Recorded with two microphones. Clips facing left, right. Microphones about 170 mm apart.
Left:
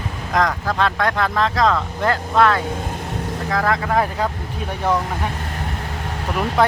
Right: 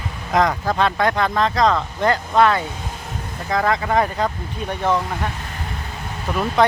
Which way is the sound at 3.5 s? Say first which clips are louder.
Right 1 dB; centre (ahead or behind).